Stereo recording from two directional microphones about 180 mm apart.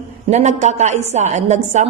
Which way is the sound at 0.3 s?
40° right (ahead or behind).